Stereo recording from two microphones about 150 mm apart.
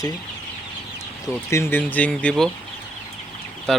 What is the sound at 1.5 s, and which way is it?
Speech, 15° left (ahead or behind).